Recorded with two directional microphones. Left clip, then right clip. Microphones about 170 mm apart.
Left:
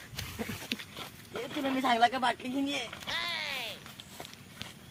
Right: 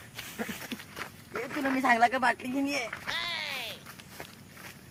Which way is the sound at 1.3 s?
15° right (ahead or behind).